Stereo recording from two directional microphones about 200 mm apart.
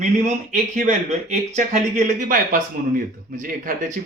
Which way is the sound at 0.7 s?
35° right (ahead or behind).